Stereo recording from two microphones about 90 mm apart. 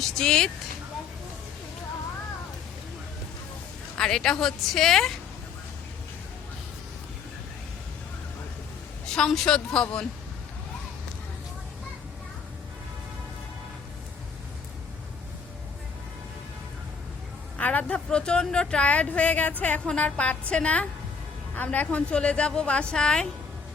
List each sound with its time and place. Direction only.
0.0 s speech: 5° left (ahead or behind)
3.9 s a woman's voice: 10° left (ahead or behind)
9.0 s speech: 5° left (ahead or behind)
17.6 s speech: 15° left (ahead or behind)